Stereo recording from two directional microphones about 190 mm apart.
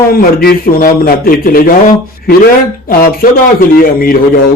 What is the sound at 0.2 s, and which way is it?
Speech, 50° left (ahead or behind).